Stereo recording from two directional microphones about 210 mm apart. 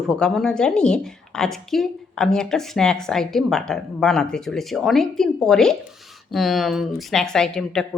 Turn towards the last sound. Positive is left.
turn(degrees=5)  # may be behind; listen again after turning